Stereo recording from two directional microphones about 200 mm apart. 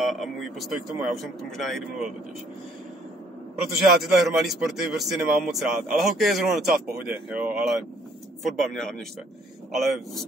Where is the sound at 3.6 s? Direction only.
Centre (ahead or behind).